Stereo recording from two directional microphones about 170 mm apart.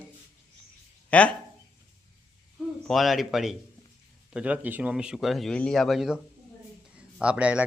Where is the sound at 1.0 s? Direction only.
5° left (ahead or behind).